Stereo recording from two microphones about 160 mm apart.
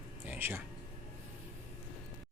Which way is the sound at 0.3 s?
15° right (ahead or behind).